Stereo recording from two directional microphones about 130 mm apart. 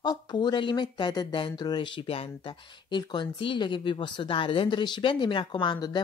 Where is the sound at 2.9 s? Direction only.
35° left (ahead or behind).